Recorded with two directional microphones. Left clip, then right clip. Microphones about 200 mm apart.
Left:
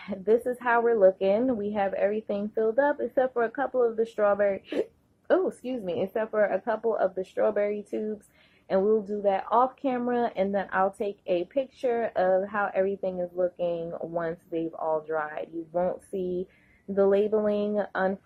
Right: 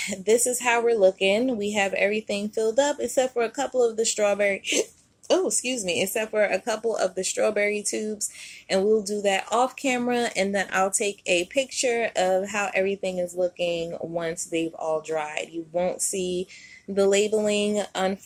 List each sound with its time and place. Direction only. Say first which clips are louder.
0.1 s speech: right 1 dB; 40° right (ahead or behind)
9.2 s speech: left 2 dB; 40° right (ahead or behind)